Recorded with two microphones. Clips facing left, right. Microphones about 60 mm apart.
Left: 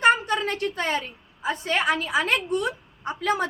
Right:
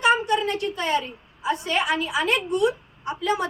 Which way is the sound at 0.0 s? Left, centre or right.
Left.